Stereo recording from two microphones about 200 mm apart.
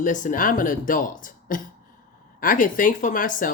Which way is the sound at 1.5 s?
40° left (ahead or behind).